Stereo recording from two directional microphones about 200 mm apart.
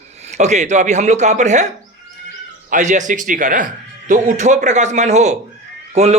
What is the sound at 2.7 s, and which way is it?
A man's voice, 40° right (ahead or behind).